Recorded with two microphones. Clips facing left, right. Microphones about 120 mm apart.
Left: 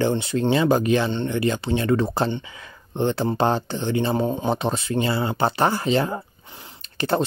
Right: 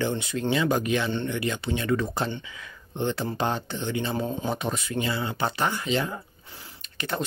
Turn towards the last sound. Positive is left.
turn(degrees=35)  # may be behind; listen again after turning